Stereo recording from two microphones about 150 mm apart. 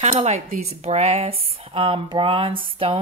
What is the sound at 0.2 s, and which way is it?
Speech, 45° right (ahead or behind).